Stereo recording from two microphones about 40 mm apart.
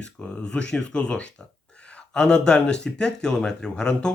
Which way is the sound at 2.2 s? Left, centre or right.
Left.